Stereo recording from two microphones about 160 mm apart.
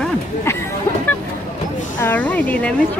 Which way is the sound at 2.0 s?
10° left (ahead or behind).